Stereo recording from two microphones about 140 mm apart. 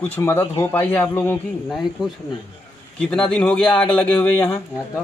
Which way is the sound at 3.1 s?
5° left (ahead or behind).